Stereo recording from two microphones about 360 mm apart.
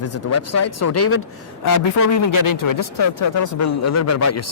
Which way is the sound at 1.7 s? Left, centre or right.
Left.